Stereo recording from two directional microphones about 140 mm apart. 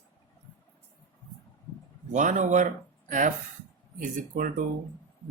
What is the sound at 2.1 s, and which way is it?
Speech, 65° right (ahead or behind).